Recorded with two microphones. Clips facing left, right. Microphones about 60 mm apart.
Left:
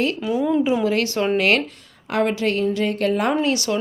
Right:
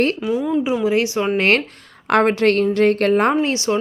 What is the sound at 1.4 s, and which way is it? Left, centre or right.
Speech, right.